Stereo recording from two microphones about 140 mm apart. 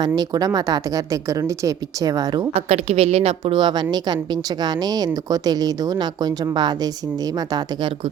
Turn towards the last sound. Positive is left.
turn(degrees=-30)  # may be behind; listen again after turning